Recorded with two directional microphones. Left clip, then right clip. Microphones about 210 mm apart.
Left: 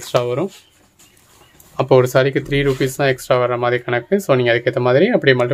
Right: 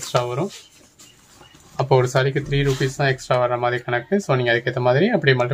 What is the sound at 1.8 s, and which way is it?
Speech, 50° left (ahead or behind).